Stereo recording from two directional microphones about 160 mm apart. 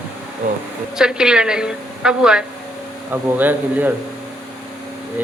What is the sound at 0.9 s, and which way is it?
A woman's voice, 5° right (ahead or behind).